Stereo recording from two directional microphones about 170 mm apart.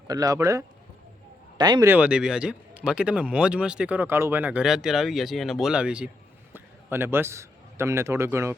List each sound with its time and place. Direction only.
0.1 s speech: 20° right (ahead or behind)
1.9 s a man's voice: 5° right (ahead or behind)